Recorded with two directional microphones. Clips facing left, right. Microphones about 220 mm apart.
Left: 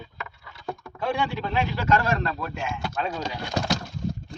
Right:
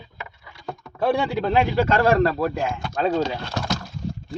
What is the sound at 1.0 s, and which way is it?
A man's voice, 35° right (ahead or behind).